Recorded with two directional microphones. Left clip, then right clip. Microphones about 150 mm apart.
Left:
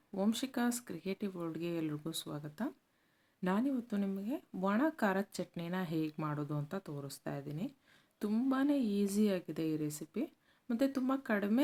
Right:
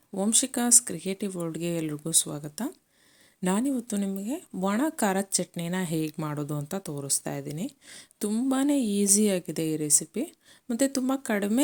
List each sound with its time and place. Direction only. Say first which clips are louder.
0.1 s speech: right 9 dB; 40° right (ahead or behind)